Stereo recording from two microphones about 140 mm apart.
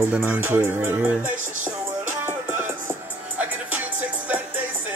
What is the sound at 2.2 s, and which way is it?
Music, 15° right (ahead or behind).